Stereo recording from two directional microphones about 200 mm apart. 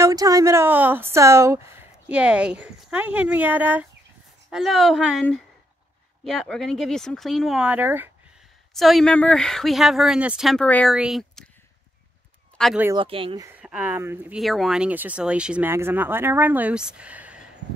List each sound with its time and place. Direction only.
0.0 s a woman's voice: 15° right (ahead or behind)
8.7 s speech: centre (ahead or behind)
12.5 s speech: centre (ahead or behind)
12.9 s speech: 25° right (ahead or behind)
13.5 s speech: 10° right (ahead or behind)
14.4 s a woman's voice: centre (ahead or behind)